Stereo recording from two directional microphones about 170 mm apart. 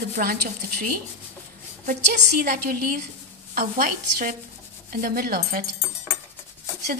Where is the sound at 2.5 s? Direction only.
55° right (ahead or behind).